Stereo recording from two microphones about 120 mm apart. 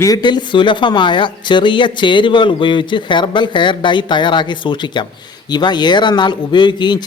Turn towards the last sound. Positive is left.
turn(degrees=40)  # may be behind; listen again after turning